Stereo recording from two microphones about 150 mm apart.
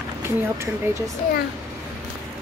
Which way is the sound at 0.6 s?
20° right (ahead or behind).